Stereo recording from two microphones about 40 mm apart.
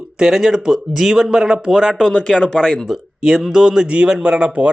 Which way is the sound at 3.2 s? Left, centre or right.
Centre.